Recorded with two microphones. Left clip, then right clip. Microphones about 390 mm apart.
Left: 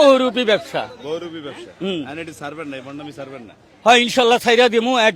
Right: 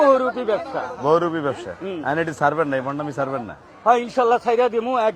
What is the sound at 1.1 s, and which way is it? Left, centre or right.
A man's voice, centre.